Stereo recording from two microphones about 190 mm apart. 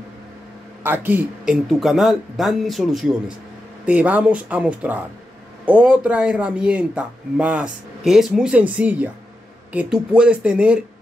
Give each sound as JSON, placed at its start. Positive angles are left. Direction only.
{"t": 0.8, "sound": "speech", "side_deg": -10}